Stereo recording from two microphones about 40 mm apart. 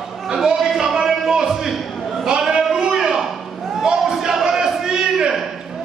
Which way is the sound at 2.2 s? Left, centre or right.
Centre.